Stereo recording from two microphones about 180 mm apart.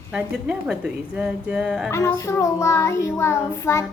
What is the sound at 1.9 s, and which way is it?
A child's voice, 15° left (ahead or behind).